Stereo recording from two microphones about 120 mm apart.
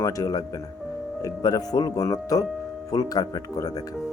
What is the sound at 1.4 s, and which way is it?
Speech, 30° left (ahead or behind).